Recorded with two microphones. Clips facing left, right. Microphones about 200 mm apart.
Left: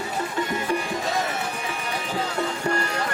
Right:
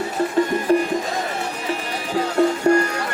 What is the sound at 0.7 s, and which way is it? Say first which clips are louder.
Music: right 10 dB; 35° right (ahead or behind).